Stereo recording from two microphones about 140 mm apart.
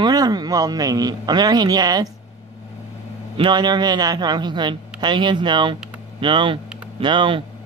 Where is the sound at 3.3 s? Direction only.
35° right (ahead or behind).